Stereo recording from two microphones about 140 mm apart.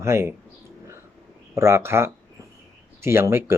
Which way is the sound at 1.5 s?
20° right (ahead or behind).